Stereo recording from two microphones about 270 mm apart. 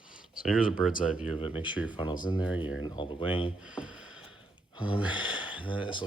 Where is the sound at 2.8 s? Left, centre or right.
Centre.